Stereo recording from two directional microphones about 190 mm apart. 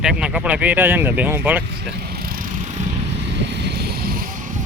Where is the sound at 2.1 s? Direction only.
50° right (ahead or behind).